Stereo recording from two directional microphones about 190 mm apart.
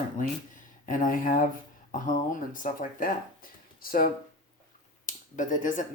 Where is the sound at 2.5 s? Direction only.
45° left (ahead or behind).